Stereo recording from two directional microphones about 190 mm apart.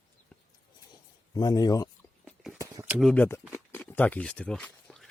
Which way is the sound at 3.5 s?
10° left (ahead or behind).